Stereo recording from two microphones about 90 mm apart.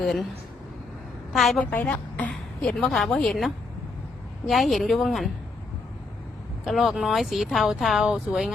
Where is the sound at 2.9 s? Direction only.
Centre (ahead or behind).